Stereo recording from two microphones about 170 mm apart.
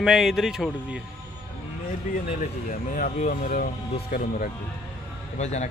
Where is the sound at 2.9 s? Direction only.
55° left (ahead or behind).